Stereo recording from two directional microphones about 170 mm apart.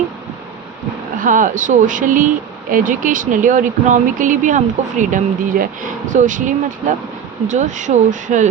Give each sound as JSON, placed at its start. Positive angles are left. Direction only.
{"t": 1.2, "sound": "speech", "side_deg": -50}